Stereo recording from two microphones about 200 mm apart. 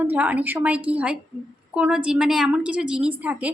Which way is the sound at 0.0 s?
10° right (ahead or behind).